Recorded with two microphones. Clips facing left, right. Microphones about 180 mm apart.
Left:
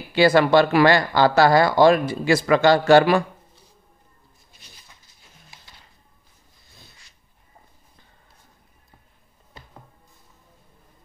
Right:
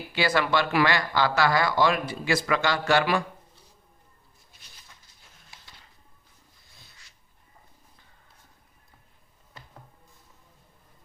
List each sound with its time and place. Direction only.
0.1 s speech: 30° left (ahead or behind)